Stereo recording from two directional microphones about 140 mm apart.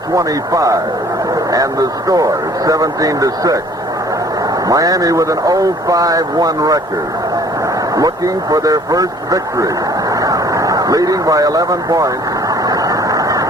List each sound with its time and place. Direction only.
0.2 s a man's voice: 25° right (ahead or behind)
4.7 s a man's voice: 25° right (ahead or behind)
7.9 s a man's voice: 25° right (ahead or behind)
10.1 s a sound: 25° right (ahead or behind)